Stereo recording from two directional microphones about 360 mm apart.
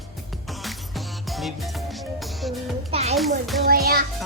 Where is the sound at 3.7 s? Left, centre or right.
Right.